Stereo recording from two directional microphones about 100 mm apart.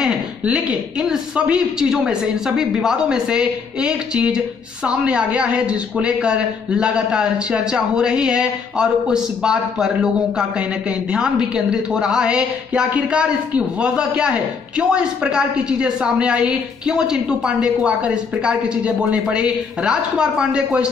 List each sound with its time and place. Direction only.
0.0 s a man's voice: 10° right (ahead or behind)